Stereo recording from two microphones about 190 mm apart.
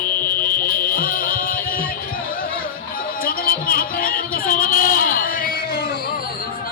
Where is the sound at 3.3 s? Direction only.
50° left (ahead or behind).